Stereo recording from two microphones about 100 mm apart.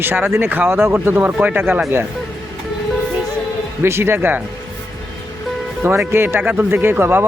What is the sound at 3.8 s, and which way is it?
Speech, 25° right (ahead or behind).